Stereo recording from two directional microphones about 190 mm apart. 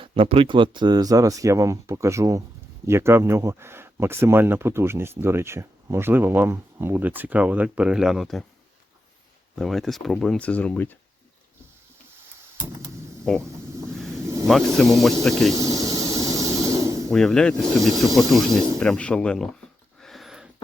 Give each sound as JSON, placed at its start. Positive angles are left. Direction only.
{"t": 0.0, "sound": "speech", "side_deg": -30}
{"t": 9.6, "sound": "speech", "side_deg": 0}
{"t": 13.3, "sound": "speech", "side_deg": 5}
{"t": 13.9, "sound": "vehicle", "side_deg": 0}
{"t": 14.4, "sound": "speech", "side_deg": 0}
{"t": 15.5, "sound": "a sound", "side_deg": -15}
{"t": 17.1, "sound": "speech", "side_deg": 0}
{"t": 20.0, "sound": "a sound", "side_deg": 0}